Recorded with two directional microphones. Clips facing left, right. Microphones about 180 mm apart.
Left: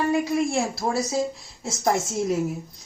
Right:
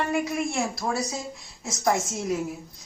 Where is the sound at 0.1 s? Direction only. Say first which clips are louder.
Left 4 dB; 30° left (ahead or behind).